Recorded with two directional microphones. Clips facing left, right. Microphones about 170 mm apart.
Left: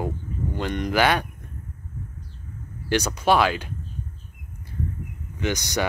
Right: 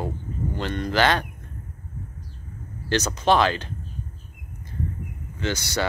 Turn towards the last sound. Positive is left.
turn(degrees=15)  # may be behind; listen again after turning